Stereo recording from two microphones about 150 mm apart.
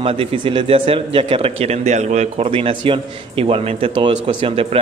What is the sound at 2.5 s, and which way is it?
A man's voice, 35° right (ahead or behind).